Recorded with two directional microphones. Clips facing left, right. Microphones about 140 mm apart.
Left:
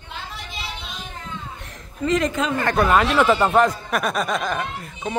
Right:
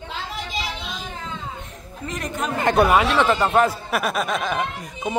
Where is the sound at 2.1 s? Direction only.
90° left.